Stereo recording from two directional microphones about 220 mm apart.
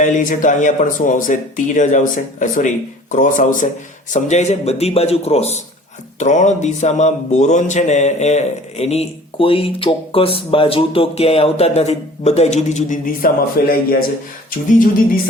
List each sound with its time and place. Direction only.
0.0 s speech: 35° left (ahead or behind)